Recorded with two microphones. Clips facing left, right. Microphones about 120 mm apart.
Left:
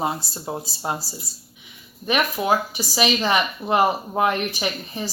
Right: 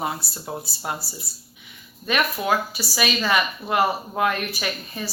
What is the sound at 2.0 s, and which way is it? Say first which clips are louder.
A woman's voice: left 2 dB; 20° left (ahead or behind).